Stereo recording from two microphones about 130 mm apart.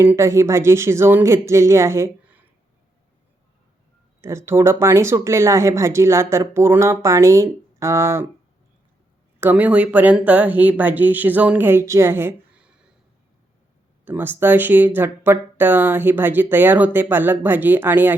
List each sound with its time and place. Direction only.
0.0 s speech: 20° right (ahead or behind)
2.2 s a sound: 10° right (ahead or behind)
4.2 s speech: 20° right (ahead or behind)
9.4 s speech: 15° right (ahead or behind)
14.0 s speech: 15° right (ahead or behind)